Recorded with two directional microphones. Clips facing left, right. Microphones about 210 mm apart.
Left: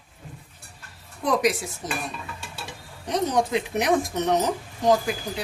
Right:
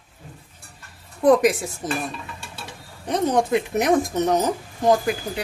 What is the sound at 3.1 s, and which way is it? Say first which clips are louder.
Speech: right 3 dB; 55° right (ahead or behind).